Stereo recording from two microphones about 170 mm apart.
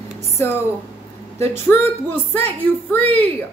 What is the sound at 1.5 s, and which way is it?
A woman's voice, 10° left (ahead or behind).